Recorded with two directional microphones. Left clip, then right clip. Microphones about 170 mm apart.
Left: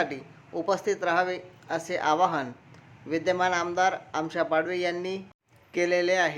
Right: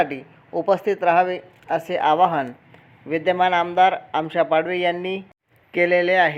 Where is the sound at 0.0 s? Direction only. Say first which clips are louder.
Right 7 dB; 25° right (ahead or behind).